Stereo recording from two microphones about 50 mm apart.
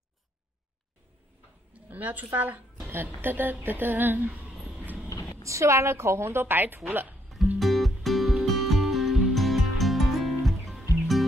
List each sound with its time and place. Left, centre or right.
1.7 s a woman's voice: right
4.7 s vehicle: right
5.4 s a woman's voice: right
7.2 s music: centre